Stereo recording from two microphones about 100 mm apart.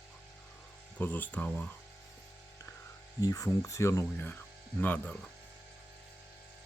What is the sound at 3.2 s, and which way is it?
Speech, 35° left (ahead or behind).